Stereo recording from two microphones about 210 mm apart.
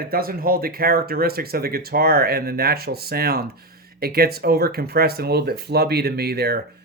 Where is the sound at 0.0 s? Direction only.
45° right (ahead or behind).